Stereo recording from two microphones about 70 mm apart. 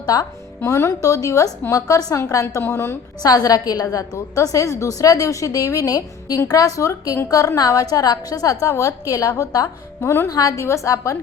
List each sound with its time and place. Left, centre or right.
0.0 s a woman's voice: left
0.6 s a woman's voice: left
3.2 s a woman's voice: left
4.4 s a woman's voice: left
8.7 s a woman's voice: left
9.0 s a woman's voice: left
10.0 s a woman's voice: left
10.2 s a woman's voice: left